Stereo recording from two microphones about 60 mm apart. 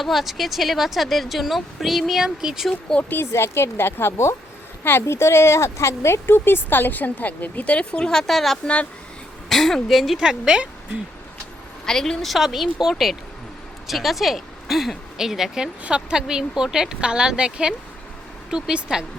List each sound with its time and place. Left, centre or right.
0.0 s speech: centre
3.3 s speech: left; by 8.5 s centre
8.6 s speech: centre
9.5 s speech: centre
10.2 s speech: centre
11.9 s speech: centre